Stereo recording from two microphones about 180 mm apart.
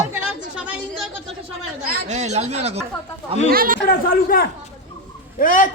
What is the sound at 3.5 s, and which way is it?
Speech, 55° right (ahead or behind).